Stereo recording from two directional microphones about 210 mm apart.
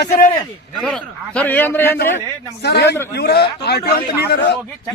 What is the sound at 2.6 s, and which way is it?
A man's voice, 50° left (ahead or behind).